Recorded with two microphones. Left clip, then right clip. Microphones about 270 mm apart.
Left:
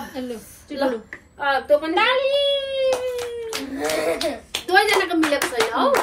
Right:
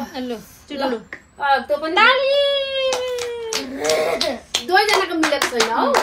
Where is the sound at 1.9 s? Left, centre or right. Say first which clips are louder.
Right 4 dB; right.